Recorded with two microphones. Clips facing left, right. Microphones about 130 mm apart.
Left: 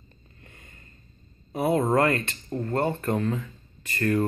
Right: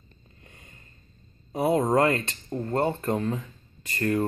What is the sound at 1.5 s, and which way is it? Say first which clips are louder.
Speech: even; 15° right (ahead or behind).